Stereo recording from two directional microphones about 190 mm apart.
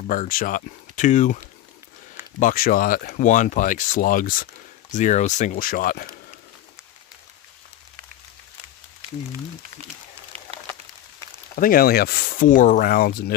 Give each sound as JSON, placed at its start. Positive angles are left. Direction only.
{"t": 0.0, "sound": "speech", "side_deg": 45}
{"t": 10.3, "sound": "a sound", "side_deg": -30}
{"t": 11.5, "sound": "speech", "side_deg": 50}